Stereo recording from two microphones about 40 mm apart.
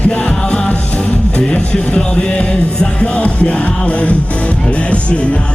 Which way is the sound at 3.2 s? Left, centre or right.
Left.